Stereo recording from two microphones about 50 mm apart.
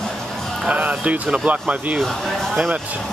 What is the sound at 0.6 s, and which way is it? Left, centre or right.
Music, right.